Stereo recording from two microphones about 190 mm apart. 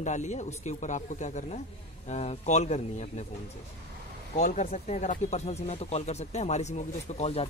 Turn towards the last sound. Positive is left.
turn(degrees=35)  # may be behind; listen again after turning